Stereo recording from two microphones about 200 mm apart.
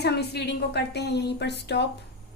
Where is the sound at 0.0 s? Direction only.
55° left (ahead or behind).